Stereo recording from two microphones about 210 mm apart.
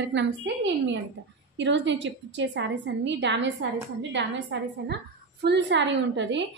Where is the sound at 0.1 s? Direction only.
60° right (ahead or behind).